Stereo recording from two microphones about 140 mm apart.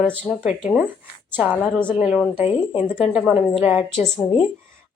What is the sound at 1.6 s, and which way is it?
Speech, 10° left (ahead or behind).